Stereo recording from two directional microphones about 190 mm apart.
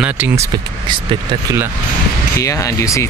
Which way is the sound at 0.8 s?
25° right (ahead or behind).